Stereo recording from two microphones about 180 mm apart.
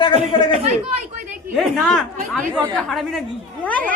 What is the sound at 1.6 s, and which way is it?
A woman's voice, centre (ahead or behind).